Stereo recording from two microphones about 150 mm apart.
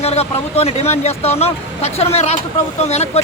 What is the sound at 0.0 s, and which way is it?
Speech, 45° left (ahead or behind).